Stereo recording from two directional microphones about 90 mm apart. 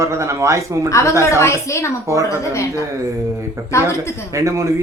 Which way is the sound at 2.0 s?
35° right (ahead or behind).